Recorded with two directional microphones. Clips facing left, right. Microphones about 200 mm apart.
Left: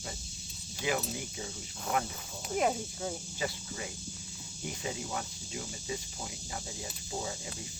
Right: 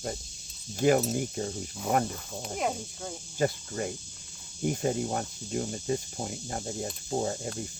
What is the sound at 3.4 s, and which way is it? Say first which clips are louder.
Speech: right 12 dB; 50° right (ahead or behind).